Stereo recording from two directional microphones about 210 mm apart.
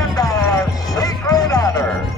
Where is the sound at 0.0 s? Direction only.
15° left (ahead or behind).